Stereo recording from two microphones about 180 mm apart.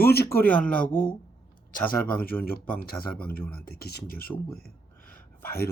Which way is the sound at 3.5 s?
60° left (ahead or behind).